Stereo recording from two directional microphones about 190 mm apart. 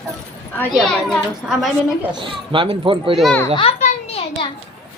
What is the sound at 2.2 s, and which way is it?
Speech, 25° right (ahead or behind).